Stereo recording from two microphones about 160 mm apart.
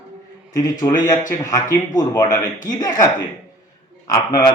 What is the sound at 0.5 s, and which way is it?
Speech, 25° left (ahead or behind).